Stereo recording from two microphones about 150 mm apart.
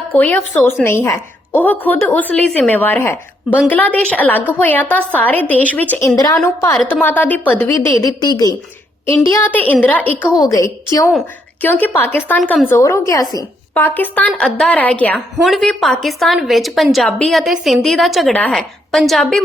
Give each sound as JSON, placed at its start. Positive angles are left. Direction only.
{"t": 0.1, "sound": "speech", "side_deg": 10}
{"t": 6.1, "sound": "a woman's voice", "side_deg": 25}
{"t": 9.3, "sound": "speech", "side_deg": 15}
{"t": 10.3, "sound": "a woman's voice", "side_deg": 25}
{"t": 11.6, "sound": "a woman's voice", "side_deg": 10}